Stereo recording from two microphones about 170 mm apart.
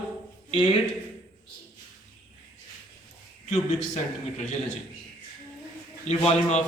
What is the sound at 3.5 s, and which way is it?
A man's voice, 45° left (ahead or behind).